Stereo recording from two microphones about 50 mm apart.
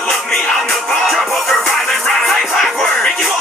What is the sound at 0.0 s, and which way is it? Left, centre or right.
Music, centre.